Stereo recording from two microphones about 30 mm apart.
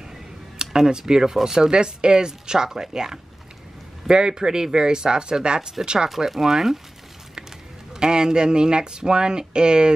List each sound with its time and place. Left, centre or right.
0.6 s speech: right
6.0 s speech: centre
7.9 s speech: right